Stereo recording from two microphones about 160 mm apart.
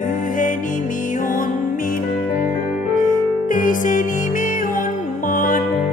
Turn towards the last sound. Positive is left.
turn(degrees=55)  # may be behind; listen again after turning